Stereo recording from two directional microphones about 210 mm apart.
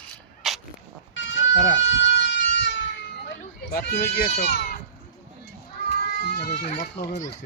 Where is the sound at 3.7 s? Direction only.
50° left (ahead or behind).